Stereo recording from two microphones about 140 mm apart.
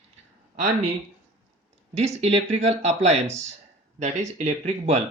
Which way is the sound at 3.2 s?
20° right (ahead or behind).